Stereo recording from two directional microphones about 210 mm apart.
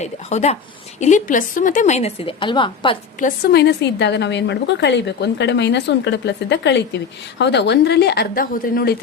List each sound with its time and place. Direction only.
0.0 s a woman's voice: 30° left (ahead or behind)
3.2 s a woman's voice: 45° left (ahead or behind)